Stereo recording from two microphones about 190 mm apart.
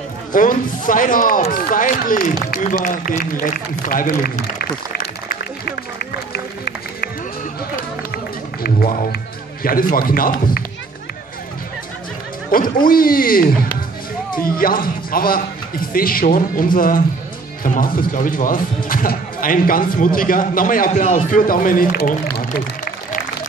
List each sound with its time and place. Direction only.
0.3 s a man's voice: 45° left (ahead or behind)
5.9 s music: 60° left (ahead or behind)
8.6 s speech: 50° left (ahead or behind)
12.4 s a man's voice: 45° left (ahead or behind)